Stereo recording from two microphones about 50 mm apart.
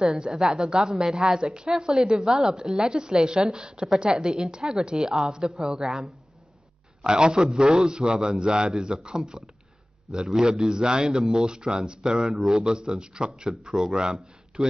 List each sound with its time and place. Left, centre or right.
0.0 s a man's voice: centre